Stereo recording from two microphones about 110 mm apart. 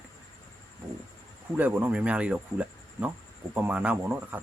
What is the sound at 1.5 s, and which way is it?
Speech, 15° right (ahead or behind).